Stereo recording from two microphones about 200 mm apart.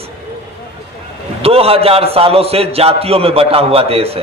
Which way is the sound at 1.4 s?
30° right (ahead or behind).